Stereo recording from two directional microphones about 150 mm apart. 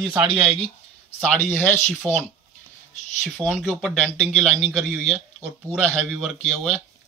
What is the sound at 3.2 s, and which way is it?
Speech, 5° left (ahead or behind).